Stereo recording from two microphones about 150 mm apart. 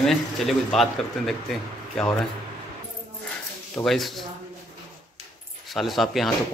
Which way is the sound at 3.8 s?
Centre (ahead or behind).